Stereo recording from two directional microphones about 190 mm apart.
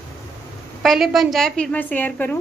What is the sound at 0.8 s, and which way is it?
A woman's voice, centre (ahead or behind).